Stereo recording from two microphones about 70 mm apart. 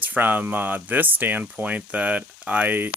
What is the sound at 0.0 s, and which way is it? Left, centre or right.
Speech, right.